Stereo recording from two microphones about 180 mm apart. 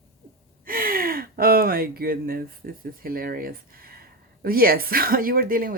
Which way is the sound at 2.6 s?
55° right (ahead or behind).